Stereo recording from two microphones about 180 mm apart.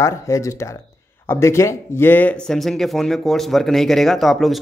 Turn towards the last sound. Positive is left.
turn(degrees=0)  # may be behind; listen again after turning